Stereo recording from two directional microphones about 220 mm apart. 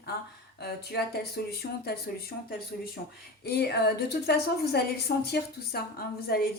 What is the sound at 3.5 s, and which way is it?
A woman's voice, 45° left (ahead or behind).